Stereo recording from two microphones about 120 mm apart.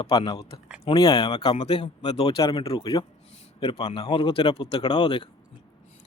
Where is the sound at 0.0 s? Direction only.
40° left (ahead or behind).